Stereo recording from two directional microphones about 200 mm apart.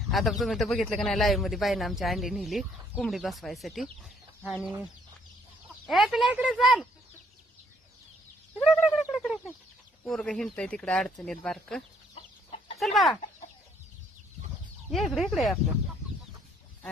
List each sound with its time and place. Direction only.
0.1 s speech: centre (ahead or behind)
5.9 s speech: centre (ahead or behind)
8.5 s bird: centre (ahead or behind)
10.0 s speech: 5° left (ahead or behind)
12.1 s chicken: 30° left (ahead or behind)
12.8 s speech: centre (ahead or behind)
14.9 s speech: centre (ahead or behind)